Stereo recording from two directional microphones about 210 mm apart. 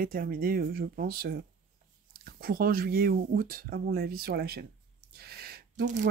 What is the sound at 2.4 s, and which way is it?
Speech, 45° right (ahead or behind).